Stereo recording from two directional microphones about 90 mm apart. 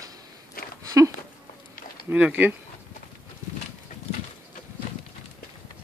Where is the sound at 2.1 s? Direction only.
15° right (ahead or behind).